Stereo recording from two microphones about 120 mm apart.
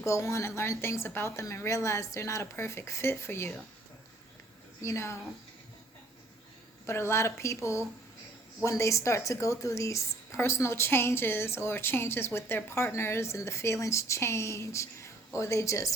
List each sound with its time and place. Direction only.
0.0 s a woman's voice: 25° left (ahead or behind)
4.8 s a woman's voice: 25° left (ahead or behind)
6.8 s a woman's voice: 20° left (ahead or behind)